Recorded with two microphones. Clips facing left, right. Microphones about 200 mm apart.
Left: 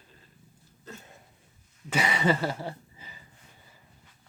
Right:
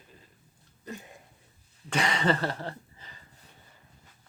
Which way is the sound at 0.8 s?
15° right (ahead or behind).